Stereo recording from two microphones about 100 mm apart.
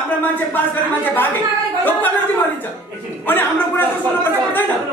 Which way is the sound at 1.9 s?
20° left (ahead or behind).